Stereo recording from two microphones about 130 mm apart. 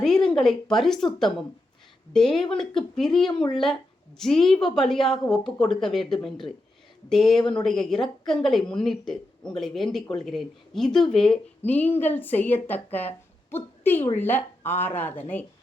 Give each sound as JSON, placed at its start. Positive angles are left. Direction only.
{"t": 0.0, "sound": "speech", "side_deg": 0}
{"t": 2.6, "sound": "a woman's voice", "side_deg": 5}
{"t": 3.3, "sound": "speech", "side_deg": 40}
{"t": 4.2, "sound": "a woman's voice", "side_deg": 5}